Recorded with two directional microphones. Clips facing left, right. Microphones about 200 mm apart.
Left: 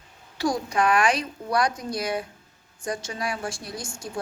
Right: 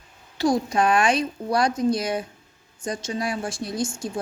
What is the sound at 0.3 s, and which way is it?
A woman's voice, 25° right (ahead or behind).